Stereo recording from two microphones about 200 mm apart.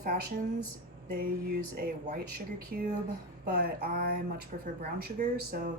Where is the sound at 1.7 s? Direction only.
50° right (ahead or behind).